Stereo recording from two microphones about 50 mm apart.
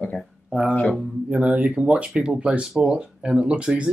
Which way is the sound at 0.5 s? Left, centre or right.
Right.